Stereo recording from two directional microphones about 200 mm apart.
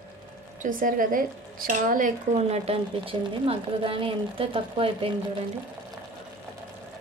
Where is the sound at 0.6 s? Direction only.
40° right (ahead or behind); by 5.0 s 25° right (ahead or behind).